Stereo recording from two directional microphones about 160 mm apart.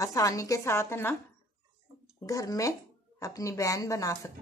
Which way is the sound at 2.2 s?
20° left (ahead or behind).